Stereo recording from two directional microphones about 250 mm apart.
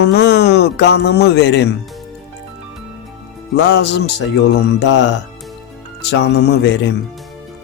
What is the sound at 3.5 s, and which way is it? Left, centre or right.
Speech, left.